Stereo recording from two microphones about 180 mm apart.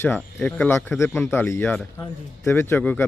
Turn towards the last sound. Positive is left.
turn(degrees=10)  # may be behind; listen again after turning